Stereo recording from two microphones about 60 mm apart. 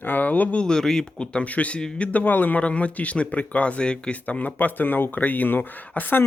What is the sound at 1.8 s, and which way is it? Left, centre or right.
Speech, centre.